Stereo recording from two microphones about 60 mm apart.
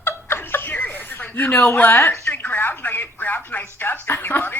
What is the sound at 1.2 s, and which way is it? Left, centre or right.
Speech, left.